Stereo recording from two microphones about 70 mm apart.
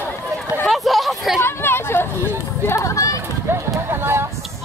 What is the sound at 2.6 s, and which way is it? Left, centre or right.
Chatter, left.